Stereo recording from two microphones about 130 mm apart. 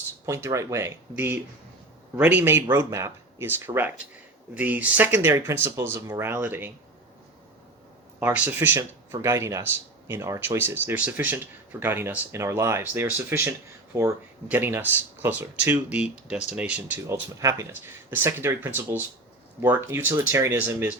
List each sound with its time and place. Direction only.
0.3 s speech: 20° right (ahead or behind)
8.2 s speech: 10° right (ahead or behind)